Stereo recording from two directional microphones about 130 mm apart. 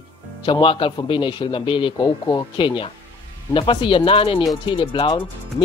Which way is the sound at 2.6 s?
40° left (ahead or behind).